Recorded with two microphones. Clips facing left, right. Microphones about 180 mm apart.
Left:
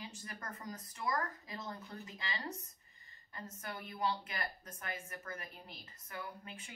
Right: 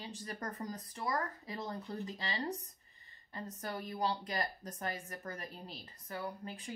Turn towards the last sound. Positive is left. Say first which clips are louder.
# right 7 dB
turn(degrees=-35)  # may be behind; listen again after turning